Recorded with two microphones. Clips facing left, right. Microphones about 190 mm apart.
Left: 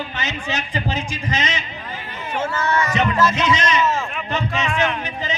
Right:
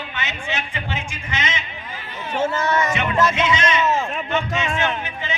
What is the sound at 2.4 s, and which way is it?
Speech, 25° right (ahead or behind).